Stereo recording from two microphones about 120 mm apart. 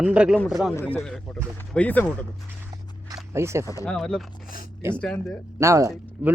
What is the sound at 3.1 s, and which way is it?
Speech, 25° right (ahead or behind).